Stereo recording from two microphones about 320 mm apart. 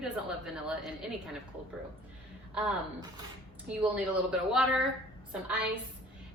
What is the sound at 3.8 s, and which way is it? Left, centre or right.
A woman's voice, centre.